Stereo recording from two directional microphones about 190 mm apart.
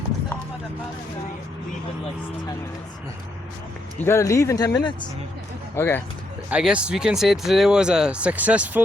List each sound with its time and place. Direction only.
3.9 s speech: 15° left (ahead or behind)
5.7 s speech: 10° left (ahead or behind)
6.5 s speech: 5° right (ahead or behind)